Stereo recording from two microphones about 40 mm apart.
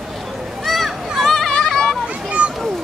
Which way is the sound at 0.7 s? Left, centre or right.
Centre.